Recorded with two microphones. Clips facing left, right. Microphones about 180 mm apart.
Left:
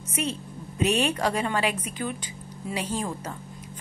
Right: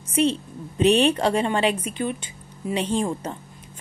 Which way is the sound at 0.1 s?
30° right (ahead or behind).